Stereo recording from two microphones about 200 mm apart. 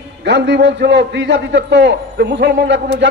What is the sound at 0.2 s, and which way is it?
A man's voice, 60° right (ahead or behind).